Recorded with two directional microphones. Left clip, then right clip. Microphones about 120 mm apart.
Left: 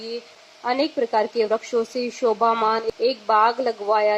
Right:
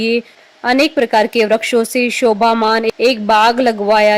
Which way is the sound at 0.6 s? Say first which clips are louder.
Right 9 dB; 40° right (ahead or behind).